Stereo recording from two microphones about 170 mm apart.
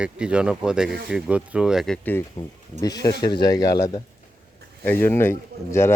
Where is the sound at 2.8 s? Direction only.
20° left (ahead or behind).